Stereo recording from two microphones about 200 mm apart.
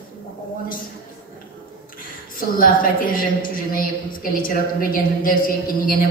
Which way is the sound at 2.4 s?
45° left (ahead or behind).